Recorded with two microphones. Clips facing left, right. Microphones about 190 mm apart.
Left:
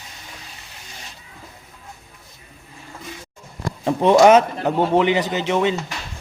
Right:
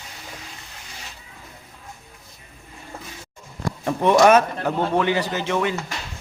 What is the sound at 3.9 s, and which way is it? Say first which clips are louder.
Speech: left 3 dB; 20° left (ahead or behind).